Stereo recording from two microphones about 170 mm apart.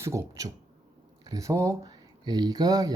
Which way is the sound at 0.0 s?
20° right (ahead or behind).